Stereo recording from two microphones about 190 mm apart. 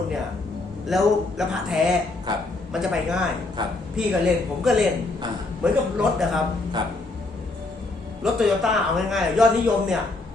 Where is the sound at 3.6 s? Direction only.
20° right (ahead or behind).